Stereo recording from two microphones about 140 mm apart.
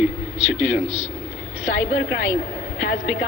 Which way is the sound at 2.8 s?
75° left (ahead or behind).